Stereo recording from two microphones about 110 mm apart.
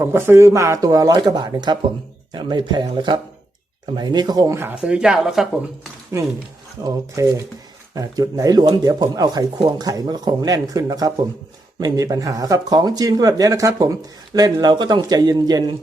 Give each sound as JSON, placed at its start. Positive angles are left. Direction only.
{"t": 0.0, "sound": "speech", "side_deg": -20}
{"t": 4.5, "sound": "speech", "side_deg": -20}
{"t": 4.8, "sound": "speech", "side_deg": -10}
{"t": 6.8, "sound": "speech", "side_deg": -30}